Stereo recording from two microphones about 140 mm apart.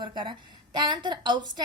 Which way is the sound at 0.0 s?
35° right (ahead or behind).